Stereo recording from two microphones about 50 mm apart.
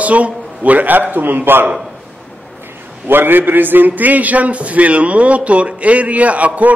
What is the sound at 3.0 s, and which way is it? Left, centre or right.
A man's voice, right.